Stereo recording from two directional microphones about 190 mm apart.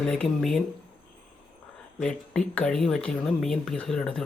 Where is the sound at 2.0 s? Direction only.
5° left (ahead or behind).